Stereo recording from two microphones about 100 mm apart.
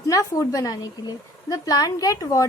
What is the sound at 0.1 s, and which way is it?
A woman's voice, 30° left (ahead or behind).